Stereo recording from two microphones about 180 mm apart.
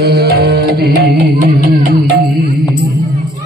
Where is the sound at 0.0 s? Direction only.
60° right (ahead or behind).